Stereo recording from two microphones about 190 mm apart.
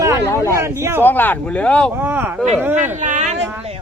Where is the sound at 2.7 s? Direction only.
40° right (ahead or behind).